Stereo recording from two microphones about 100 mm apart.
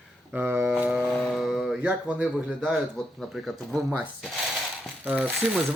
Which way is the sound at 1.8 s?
15° right (ahead or behind).